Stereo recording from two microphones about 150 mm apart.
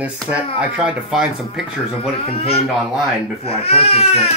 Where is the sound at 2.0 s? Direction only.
40° left (ahead or behind).